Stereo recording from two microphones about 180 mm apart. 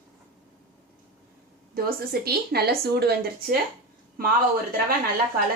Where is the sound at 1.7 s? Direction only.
55° right (ahead or behind).